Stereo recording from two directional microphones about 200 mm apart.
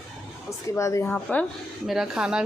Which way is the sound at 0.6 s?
15° left (ahead or behind).